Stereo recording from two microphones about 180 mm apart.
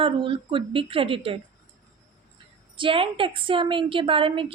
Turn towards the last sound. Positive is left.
turn(degrees=-30)  # may be behind; listen again after turning